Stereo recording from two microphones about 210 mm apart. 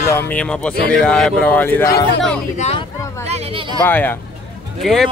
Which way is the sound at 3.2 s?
30° right (ahead or behind).